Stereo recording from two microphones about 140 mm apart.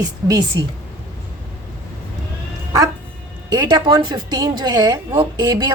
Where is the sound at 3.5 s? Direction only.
25° right (ahead or behind).